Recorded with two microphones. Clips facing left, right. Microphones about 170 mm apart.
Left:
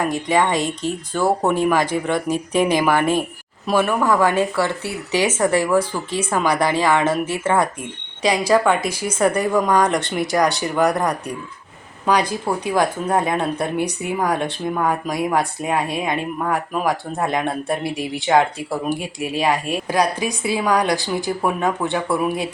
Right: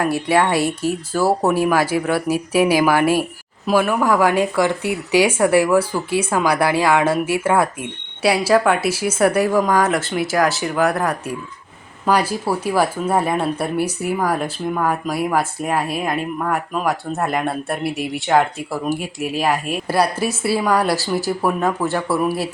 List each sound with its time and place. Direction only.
0.0 s speech: 10° right (ahead or behind)